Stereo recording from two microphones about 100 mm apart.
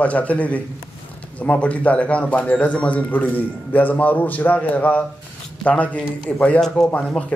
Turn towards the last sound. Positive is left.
turn(degrees=10)  # may be behind; listen again after turning